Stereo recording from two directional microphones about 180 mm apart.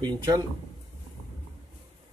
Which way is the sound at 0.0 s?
25° right (ahead or behind).